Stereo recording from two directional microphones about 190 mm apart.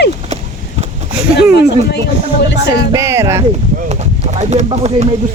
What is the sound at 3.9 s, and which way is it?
Speech, 35° right (ahead or behind).